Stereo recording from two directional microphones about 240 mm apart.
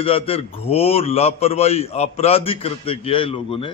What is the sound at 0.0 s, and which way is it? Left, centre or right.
A man's voice, left.